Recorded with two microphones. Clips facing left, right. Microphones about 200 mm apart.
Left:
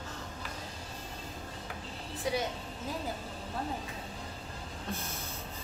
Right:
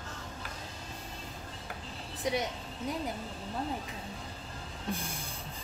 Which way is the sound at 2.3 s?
20° right (ahead or behind).